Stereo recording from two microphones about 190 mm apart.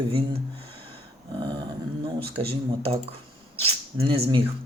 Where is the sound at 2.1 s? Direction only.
30° right (ahead or behind).